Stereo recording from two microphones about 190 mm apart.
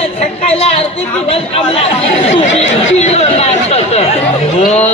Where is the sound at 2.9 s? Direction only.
35° left (ahead or behind).